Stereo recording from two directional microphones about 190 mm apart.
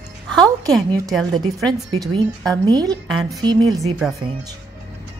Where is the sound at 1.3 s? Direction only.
20° right (ahead or behind).